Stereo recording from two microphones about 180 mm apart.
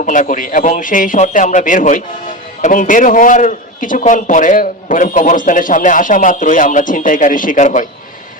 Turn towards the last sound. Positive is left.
turn(degrees=45)  # may be behind; listen again after turning